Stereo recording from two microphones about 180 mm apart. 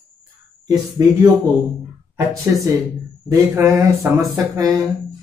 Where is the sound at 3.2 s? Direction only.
15° right (ahead or behind).